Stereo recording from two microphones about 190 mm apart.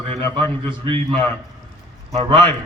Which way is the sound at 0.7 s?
25° right (ahead or behind).